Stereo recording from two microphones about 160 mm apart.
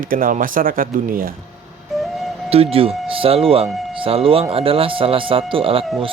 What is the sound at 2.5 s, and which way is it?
Speech, 35° right (ahead or behind).